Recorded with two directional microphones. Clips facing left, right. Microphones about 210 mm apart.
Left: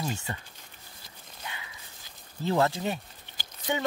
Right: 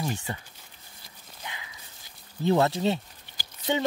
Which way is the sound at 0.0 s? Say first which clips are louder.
Right 2 dB; 15° right (ahead or behind).